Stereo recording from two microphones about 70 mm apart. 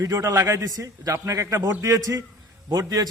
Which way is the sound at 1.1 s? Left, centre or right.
Right.